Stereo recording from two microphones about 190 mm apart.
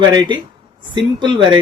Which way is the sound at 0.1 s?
20° right (ahead or behind).